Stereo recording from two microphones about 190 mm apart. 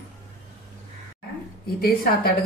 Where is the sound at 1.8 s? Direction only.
55° left (ahead or behind).